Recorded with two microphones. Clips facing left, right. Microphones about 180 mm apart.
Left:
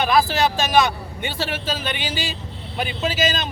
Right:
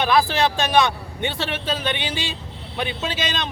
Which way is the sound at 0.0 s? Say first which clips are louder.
Even; centre (ahead or behind).